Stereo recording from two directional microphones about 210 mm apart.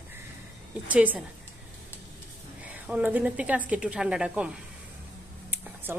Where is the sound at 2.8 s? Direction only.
5° right (ahead or behind).